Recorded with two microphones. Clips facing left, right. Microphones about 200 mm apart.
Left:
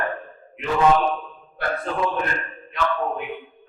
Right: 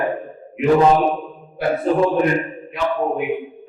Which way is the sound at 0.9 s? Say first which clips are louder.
Right 4 dB; 15° right (ahead or behind).